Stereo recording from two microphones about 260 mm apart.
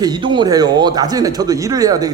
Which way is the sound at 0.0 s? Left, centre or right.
Centre.